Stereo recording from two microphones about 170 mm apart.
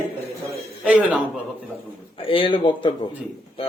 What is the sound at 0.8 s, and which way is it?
Speech, 10° right (ahead or behind).